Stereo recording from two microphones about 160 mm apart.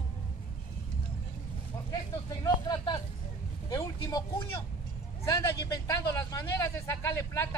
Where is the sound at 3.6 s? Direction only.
20° left (ahead or behind).